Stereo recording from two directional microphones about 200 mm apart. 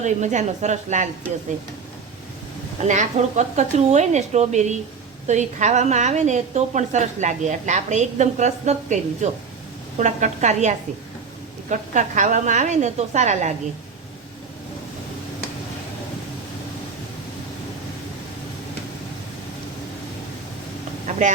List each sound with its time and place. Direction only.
0.0 s a woman's voice: 35° right (ahead or behind)
2.8 s a woman's voice: 35° right (ahead or behind)